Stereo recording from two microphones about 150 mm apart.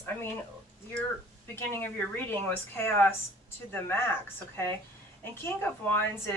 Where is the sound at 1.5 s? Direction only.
15° left (ahead or behind).